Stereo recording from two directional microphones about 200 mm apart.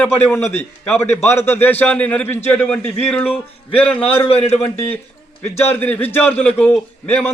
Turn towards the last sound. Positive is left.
turn(degrees=10)  # may be behind; listen again after turning